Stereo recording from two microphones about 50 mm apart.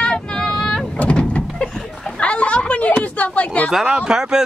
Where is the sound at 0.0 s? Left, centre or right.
Centre.